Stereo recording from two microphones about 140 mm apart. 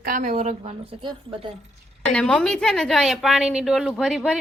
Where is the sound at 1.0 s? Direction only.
35° right (ahead or behind).